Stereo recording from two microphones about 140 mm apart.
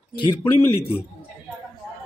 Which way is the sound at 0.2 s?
35° left (ahead or behind).